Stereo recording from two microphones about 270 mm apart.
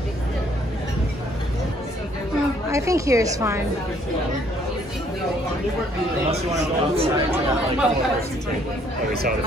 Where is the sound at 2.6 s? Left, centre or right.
Centre.